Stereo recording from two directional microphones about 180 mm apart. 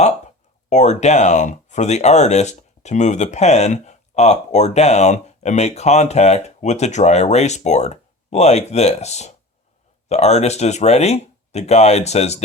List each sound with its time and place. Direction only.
0.7 s speech: 40° left (ahead or behind)